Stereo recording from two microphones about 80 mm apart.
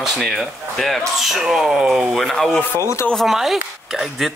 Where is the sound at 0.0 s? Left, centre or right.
Centre.